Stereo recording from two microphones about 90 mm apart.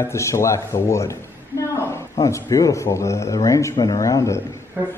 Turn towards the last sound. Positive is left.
turn(degrees=-25)  # may be behind; listen again after turning